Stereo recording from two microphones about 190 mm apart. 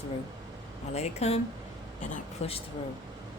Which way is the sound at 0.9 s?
35° left (ahead or behind).